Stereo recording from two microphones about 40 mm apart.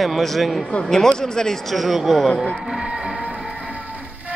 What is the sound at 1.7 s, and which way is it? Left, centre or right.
Speech, centre.